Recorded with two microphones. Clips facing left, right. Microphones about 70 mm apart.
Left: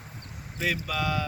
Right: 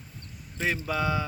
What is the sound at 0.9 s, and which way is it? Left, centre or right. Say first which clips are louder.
Speech: right 3 dB; right.